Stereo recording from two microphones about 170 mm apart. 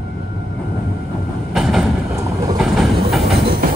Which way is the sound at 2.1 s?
15° right (ahead or behind).